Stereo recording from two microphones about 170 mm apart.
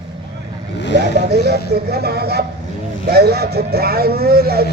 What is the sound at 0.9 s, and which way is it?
Speech, 75° right (ahead or behind).